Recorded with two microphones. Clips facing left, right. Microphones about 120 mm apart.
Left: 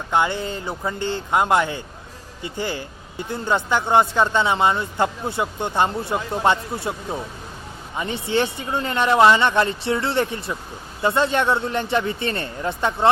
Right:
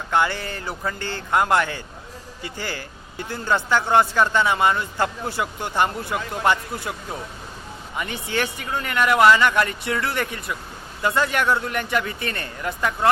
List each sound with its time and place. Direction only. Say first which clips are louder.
0.1 s speech: left 1 dB; 20° left (ahead or behind)